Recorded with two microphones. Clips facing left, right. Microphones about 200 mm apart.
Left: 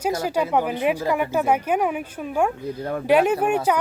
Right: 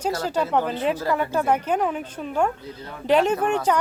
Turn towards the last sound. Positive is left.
turn(degrees=10)  # may be behind; listen again after turning